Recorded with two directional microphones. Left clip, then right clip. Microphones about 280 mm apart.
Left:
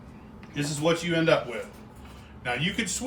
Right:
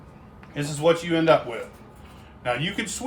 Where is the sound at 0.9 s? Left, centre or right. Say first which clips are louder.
Right 5 dB; right.